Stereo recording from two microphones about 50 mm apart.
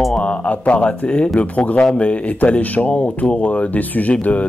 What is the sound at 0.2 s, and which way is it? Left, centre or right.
Speech, left.